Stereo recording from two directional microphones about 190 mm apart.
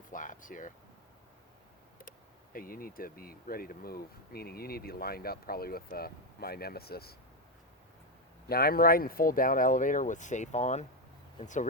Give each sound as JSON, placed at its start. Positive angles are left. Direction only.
{"t": 0.1, "sound": "a sound", "side_deg": 45}
{"t": 2.0, "sound": "speech", "side_deg": 45}
{"t": 8.4, "sound": "speech", "side_deg": 55}